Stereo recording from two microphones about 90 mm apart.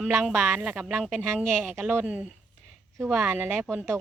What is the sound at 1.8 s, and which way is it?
Speech, 20° right (ahead or behind).